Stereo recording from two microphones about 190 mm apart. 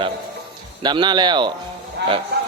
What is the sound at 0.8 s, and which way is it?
Speech, 25° right (ahead or behind).